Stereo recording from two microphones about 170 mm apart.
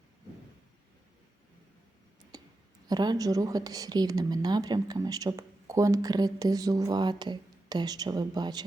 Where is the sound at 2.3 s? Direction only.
25° right (ahead or behind).